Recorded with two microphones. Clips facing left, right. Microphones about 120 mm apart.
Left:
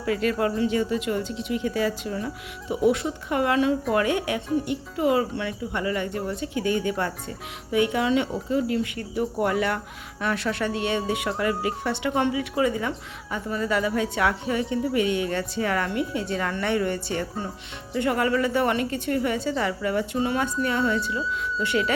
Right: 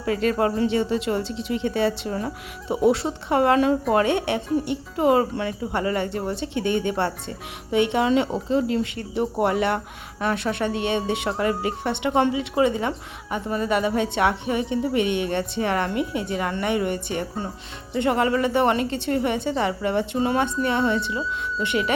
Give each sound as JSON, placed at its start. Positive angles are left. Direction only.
{"t": 0.0, "sound": "speech", "side_deg": -30}
{"t": 3.9, "sound": "speech", "side_deg": -30}